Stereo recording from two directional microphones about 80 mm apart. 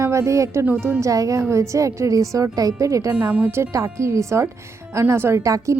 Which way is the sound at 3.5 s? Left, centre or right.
Right.